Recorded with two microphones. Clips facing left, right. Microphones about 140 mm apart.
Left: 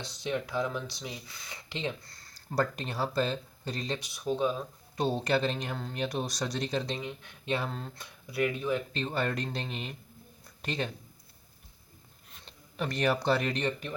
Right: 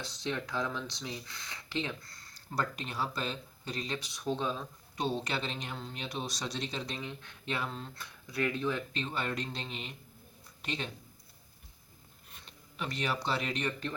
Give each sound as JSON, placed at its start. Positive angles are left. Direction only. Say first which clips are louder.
{"t": 0.0, "sound": "speech", "louder": "left 3 dB", "side_deg": 15}
{"t": 1.8, "sound": "speech", "louder": "left 6 dB", "side_deg": 30}
{"t": 4.0, "sound": "speech", "louder": "left 5 dB", "side_deg": 10}
{"t": 5.0, "sound": "speech", "louder": "left 6 dB", "side_deg": 45}
{"t": 6.8, "sound": "speech", "louder": "left 4 dB", "side_deg": 25}
{"t": 7.2, "sound": "speech", "louder": "left 4 dB", "side_deg": 15}
{"t": 8.9, "sound": "speech", "louder": "left 4 dB", "side_deg": 40}
{"t": 12.7, "sound": "speech", "louder": "left 6 dB", "side_deg": 45}